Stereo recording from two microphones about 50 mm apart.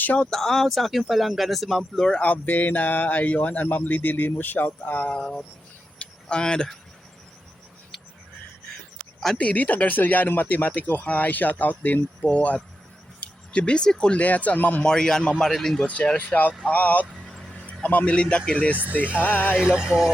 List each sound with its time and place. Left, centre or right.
0.2 s speech: centre
2.2 s speech: left
5.1 s a man's voice: centre
6.0 s a sound: centre
9.4 s speech: left
13.1 s a sound: left
13.9 s speech: centre
14.8 s a man's voice: centre
15.9 s speech: left
17.5 s a sound: left
17.8 s speech: left
19.2 s speech: left
19.6 s music: centre